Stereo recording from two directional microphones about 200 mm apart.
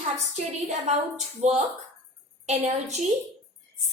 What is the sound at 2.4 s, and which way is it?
Speech, 35° right (ahead or behind).